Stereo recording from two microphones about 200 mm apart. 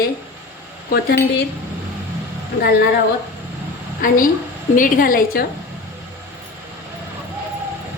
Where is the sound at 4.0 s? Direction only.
45° left (ahead or behind).